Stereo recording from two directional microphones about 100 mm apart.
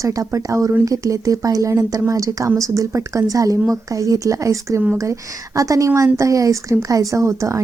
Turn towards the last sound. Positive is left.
turn(degrees=-30)  # may be behind; listen again after turning